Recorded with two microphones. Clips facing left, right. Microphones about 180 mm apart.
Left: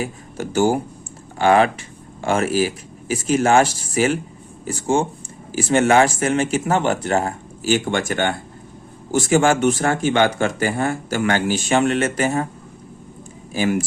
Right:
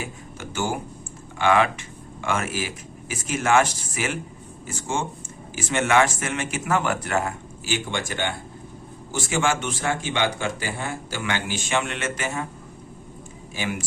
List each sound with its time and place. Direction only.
0.0 s speech: 35° left (ahead or behind)
13.5 s speech: 40° left (ahead or behind)